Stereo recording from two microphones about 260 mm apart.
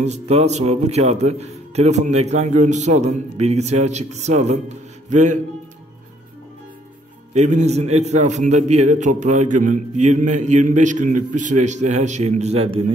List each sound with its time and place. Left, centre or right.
0.0 s a man's voice: right
7.3 s a man's voice: right